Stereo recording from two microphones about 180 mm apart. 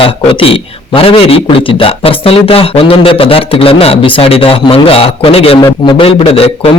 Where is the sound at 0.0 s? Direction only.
30° left (ahead or behind).